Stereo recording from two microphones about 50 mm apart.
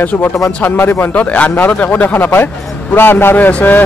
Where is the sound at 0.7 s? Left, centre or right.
Left.